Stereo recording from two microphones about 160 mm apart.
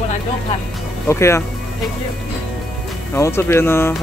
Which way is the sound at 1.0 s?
15° left (ahead or behind).